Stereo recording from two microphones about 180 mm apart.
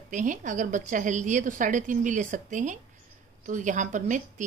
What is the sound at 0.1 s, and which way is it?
A woman's voice, 45° right (ahead or behind).